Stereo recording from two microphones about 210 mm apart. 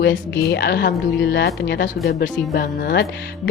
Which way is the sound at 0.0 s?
55° left (ahead or behind).